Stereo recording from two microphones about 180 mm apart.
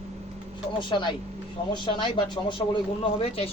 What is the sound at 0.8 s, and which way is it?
Speech, 25° left (ahead or behind).